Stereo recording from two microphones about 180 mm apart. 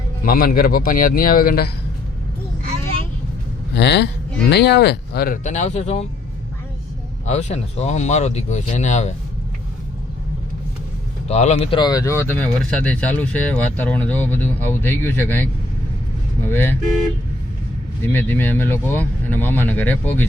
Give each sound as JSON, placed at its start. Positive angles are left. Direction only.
{"t": 0.2, "sound": "speech", "side_deg": 55}
{"t": 3.8, "sound": "speech", "side_deg": 65}
{"t": 7.3, "sound": "speech", "side_deg": 40}
{"t": 11.3, "sound": "speech", "side_deg": 40}
{"t": 16.5, "sound": "speech", "side_deg": 10}
{"t": 18.0, "sound": "speech", "side_deg": 10}